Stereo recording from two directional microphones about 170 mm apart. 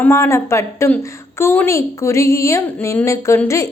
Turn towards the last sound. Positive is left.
turn(degrees=15)  # may be behind; listen again after turning